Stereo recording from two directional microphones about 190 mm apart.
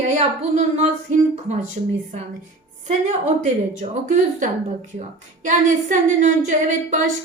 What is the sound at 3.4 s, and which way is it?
Speech, 40° right (ahead or behind).